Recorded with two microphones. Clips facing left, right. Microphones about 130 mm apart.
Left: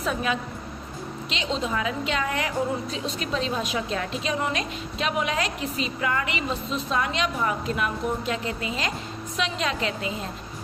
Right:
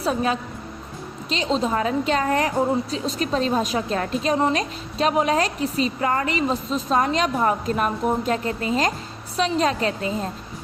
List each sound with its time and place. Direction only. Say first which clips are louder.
0.0 s a woman's voice: right 4 dB; 35° right (ahead or behind)